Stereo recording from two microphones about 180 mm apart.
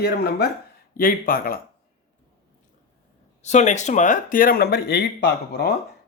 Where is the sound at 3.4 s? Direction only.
40° left (ahead or behind); by 5.7 s 60° left (ahead or behind).